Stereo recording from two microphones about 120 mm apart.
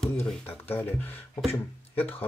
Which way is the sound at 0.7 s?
15° left (ahead or behind).